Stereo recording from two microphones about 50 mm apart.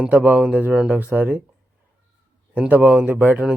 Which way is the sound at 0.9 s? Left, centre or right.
Right.